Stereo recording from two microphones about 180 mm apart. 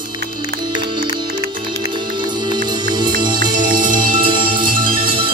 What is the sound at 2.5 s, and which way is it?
Music, 25° right (ahead or behind).